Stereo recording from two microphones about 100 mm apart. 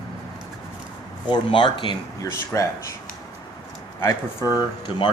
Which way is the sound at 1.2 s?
50° left (ahead or behind).